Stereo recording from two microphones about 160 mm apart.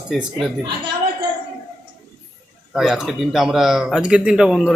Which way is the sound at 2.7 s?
Centre (ahead or behind).